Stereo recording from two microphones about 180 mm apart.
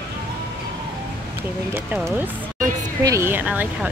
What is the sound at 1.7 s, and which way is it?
Speech, 15° right (ahead or behind).